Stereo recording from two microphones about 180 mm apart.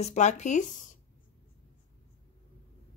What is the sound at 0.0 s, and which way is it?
Speech, 40° left (ahead or behind).